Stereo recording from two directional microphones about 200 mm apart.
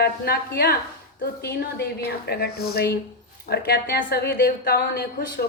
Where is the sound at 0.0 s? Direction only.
50° left (ahead or behind).